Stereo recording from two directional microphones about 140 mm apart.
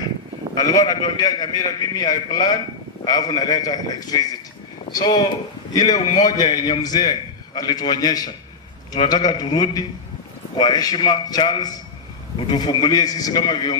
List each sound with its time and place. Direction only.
0.6 s a man's voice: 25° left (ahead or behind)